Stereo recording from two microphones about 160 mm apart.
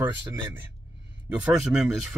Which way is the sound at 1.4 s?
5° right (ahead or behind).